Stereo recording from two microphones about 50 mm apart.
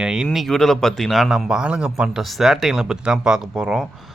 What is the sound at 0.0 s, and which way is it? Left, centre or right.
Speech, centre.